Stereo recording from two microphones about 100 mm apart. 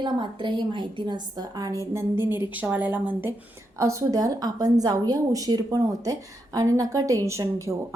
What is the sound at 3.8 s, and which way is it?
A woman's voice, 30° right (ahead or behind).